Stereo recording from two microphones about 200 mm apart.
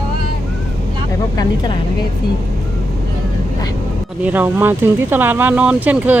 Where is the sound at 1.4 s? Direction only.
20° left (ahead or behind).